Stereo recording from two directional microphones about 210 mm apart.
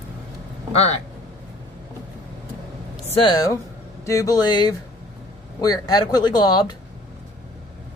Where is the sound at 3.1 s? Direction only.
25° left (ahead or behind).